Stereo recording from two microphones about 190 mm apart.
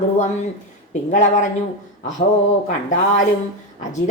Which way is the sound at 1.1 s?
40° left (ahead or behind).